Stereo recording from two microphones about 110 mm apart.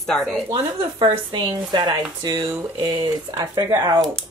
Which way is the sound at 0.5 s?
45° right (ahead or behind).